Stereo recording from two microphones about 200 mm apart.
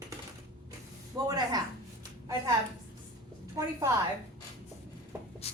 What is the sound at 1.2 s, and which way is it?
Speech, 20° right (ahead or behind).